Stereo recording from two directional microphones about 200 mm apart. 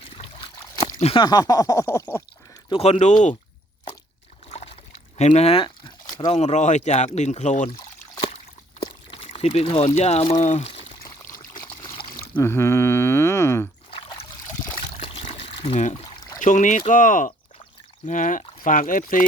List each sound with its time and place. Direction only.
0.0 s a sound: 25° left (ahead or behind)
0.9 s speech: 35° left (ahead or behind); by 2.2 s 10° left (ahead or behind)
2.6 s speech: 30° left (ahead or behind)
4.4 s a sound: 30° left (ahead or behind)
6.3 s speech: 35° left (ahead or behind)
8.8 s speech: 25° left (ahead or behind)
11.0 s trickle: 15° left (ahead or behind)
12.3 s speech: 10° left (ahead or behind)
13.9 s a sound: 25° left (ahead or behind)
14.4 s trickle: 15° left (ahead or behind)
14.9 s trickle: 25° left (ahead or behind)
16.4 s speech: 40° left (ahead or behind)